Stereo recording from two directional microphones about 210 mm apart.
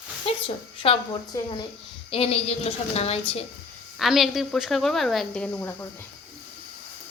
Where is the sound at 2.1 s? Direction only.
30° left (ahead or behind).